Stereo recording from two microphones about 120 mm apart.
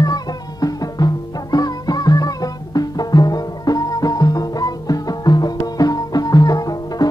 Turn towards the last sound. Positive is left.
turn(degrees=30)  # may be behind; listen again after turning